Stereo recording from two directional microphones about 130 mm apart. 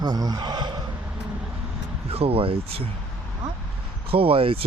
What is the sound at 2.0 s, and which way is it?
Speech, 50° right (ahead or behind).